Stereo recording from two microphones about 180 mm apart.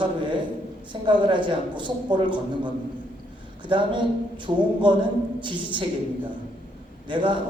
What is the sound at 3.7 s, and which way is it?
A man's voice, 25° right (ahead or behind).